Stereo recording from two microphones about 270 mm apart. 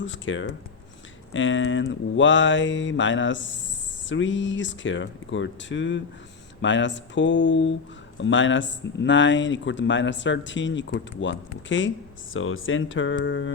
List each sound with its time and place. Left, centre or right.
0.0 s speech: left